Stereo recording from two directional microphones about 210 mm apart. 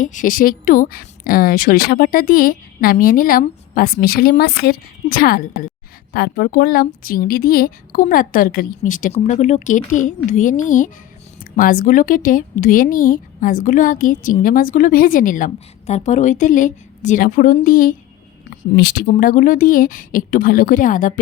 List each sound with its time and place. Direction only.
0.0 s a woman's voice: 40° left (ahead or behind)
19.0 s a woman's voice: 40° left (ahead or behind)